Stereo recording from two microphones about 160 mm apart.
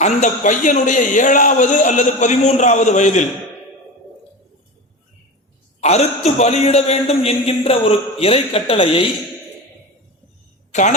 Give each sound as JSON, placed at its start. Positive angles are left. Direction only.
{"t": 0.0, "sound": "a man's voice", "side_deg": 50}
{"t": 5.8, "sound": "a man's voice", "side_deg": 40}
{"t": 10.7, "sound": "speech", "side_deg": 50}